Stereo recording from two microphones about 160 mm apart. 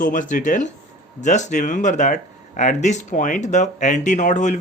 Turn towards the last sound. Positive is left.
turn(degrees=50)  # may be behind; listen again after turning